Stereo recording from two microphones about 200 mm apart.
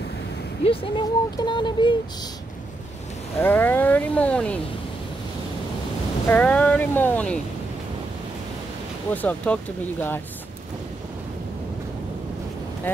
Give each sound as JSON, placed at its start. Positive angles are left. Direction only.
{"t": 0.7, "sound": "speech", "side_deg": 25}
{"t": 3.3, "sound": "speech", "side_deg": 10}
{"t": 6.2, "sound": "speech", "side_deg": 10}
{"t": 9.1, "sound": "speech", "side_deg": 5}
{"t": 12.9, "sound": "speech", "side_deg": 10}